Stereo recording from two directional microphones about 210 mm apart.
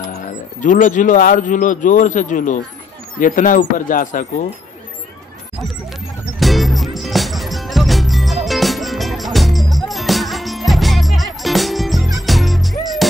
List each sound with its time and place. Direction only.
0.0 s speech: 35° left (ahead or behind)
6.4 s music: centre (ahead or behind)